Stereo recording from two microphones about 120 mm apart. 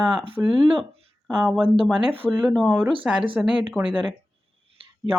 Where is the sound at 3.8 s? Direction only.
5° right (ahead or behind).